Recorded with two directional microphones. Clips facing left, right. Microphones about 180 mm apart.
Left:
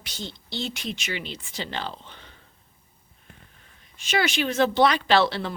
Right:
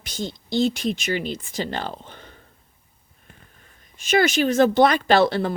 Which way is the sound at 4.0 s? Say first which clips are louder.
Right 6 dB; 45° right (ahead or behind).